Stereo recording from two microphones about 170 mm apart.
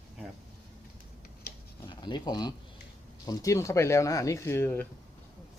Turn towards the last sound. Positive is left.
turn(degrees=10)  # may be behind; listen again after turning